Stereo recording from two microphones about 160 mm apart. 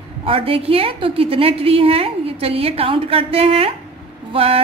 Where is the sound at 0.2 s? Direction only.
35° right (ahead or behind).